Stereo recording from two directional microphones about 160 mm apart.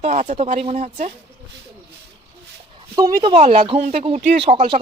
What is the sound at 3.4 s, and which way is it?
Speech, 40° right (ahead or behind).